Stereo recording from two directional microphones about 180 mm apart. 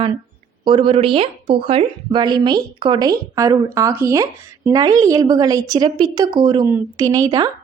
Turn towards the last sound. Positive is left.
turn(degrees=-20)  # may be behind; listen again after turning